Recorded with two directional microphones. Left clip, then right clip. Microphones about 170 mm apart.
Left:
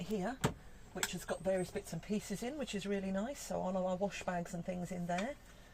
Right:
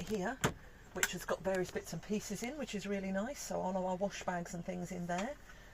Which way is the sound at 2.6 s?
35° left (ahead or behind).